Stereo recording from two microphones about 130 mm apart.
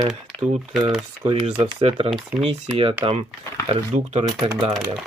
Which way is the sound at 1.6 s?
50° right (ahead or behind).